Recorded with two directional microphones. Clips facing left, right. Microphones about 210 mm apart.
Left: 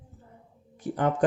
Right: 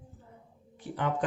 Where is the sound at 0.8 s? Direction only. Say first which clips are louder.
Left 6 dB; 45° left (ahead or behind).